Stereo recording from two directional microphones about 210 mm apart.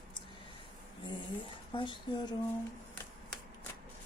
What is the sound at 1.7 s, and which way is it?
Speech, 20° left (ahead or behind).